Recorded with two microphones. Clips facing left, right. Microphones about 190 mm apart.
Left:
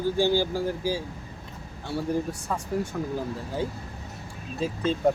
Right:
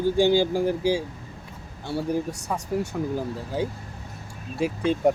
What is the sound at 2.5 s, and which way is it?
Speech, 15° right (ahead or behind).